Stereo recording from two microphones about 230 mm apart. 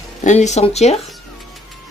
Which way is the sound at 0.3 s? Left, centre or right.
Left.